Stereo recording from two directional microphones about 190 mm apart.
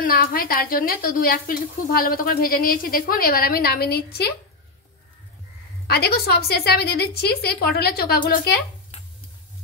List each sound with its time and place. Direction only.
0.0 s a woman's voice: 50° left (ahead or behind)
5.9 s a woman's voice: 55° left (ahead or behind)